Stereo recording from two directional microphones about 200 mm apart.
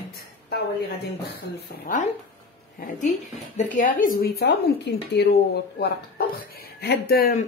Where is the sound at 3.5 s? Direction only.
40° left (ahead or behind).